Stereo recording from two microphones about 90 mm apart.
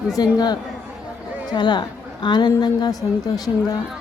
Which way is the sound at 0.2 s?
50° left (ahead or behind).